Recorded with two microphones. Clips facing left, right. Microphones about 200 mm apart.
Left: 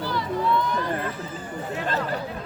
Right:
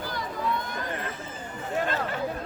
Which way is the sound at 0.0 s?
45° right (ahead or behind).